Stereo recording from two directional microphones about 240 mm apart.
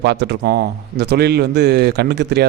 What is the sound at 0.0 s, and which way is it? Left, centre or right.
A man's voice, right.